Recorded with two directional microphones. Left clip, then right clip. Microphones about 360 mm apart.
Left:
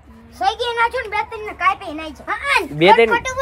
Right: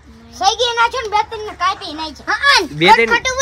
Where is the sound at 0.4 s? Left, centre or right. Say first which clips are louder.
Right 4 dB; centre.